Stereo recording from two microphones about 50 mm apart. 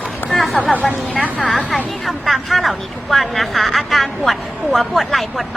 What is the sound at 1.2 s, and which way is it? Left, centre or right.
Speech, left.